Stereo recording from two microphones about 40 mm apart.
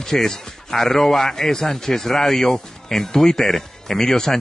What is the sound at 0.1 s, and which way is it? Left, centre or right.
A man's voice, centre.